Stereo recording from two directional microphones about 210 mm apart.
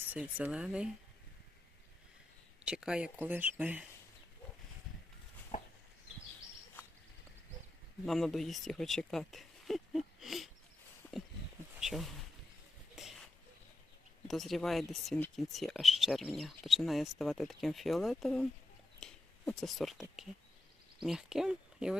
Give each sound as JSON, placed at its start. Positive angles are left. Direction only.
{"t": 0.1, "sound": "speech", "side_deg": -5}
{"t": 2.6, "sound": "speech", "side_deg": -5}
{"t": 5.5, "sound": "a sound", "side_deg": 30}
{"t": 8.0, "sound": "speech", "side_deg": 0}
{"t": 11.0, "sound": "a sound", "side_deg": 10}
{"t": 14.3, "sound": "speech", "side_deg": 0}